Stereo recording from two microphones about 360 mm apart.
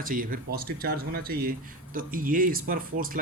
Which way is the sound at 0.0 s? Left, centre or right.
Right.